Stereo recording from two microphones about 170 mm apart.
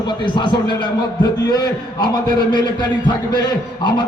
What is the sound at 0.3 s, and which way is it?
A man's voice, 25° left (ahead or behind).